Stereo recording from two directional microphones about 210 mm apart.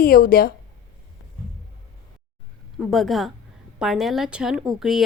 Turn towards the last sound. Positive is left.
turn(degrees=0)  # may be behind; listen again after turning